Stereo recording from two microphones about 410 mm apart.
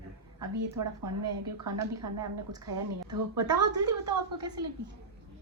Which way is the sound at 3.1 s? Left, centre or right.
Right.